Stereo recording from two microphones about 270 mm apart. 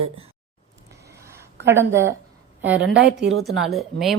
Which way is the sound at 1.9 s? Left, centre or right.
Right.